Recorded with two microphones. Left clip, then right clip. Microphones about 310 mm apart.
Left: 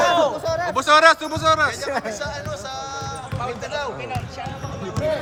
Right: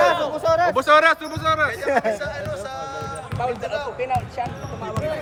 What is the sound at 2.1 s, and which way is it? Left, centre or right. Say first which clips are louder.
Music: right 1 dB; centre.